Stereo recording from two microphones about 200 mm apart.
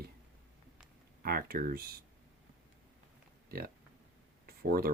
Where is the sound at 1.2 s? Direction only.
50° right (ahead or behind).